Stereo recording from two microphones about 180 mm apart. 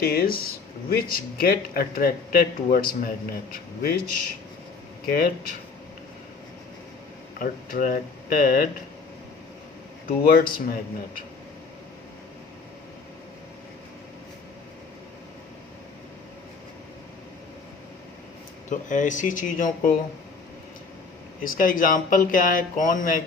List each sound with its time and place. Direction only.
0.0 s speech: 55° left (ahead or behind)
7.3 s speech: 50° left (ahead or behind)
10.1 s speech: 55° left (ahead or behind)
18.7 s speech: 45° left (ahead or behind)
21.4 s speech: 50° left (ahead or behind)